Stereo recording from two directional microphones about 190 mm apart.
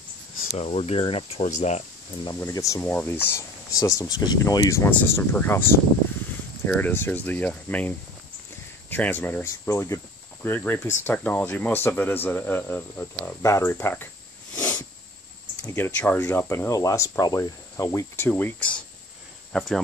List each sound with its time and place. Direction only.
0.5 s speech: 35° left (ahead or behind)
2.4 s speech: 15° left (ahead or behind)
6.6 s speech: 10° left (ahead or behind)
8.9 s speech: 10° left (ahead or behind)
14.5 s a sound: 5° left (ahead or behind)
15.6 s speech: 10° left (ahead or behind)